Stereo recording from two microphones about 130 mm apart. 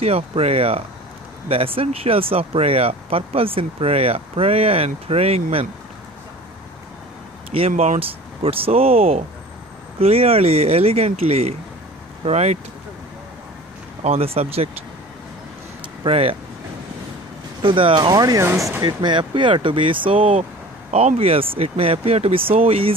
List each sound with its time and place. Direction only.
0.0 s speech: 50° right (ahead or behind)
7.7 s speech: 70° right (ahead or behind)
8.0 s speech: 45° right (ahead or behind)
14.0 s speech: 50° right (ahead or behind)
16.0 s speech: 45° right (ahead or behind)
17.6 s speech: 40° right (ahead or behind); by 18.8 s 20° right (ahead or behind)
18.8 s speech: 35° right (ahead or behind)